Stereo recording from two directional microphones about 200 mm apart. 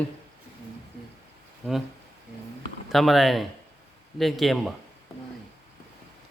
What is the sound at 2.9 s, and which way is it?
Speech, centre (ahead or behind).